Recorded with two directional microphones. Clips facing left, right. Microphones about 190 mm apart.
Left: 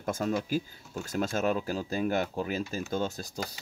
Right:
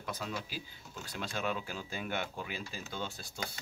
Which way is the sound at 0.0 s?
50° left (ahead or behind).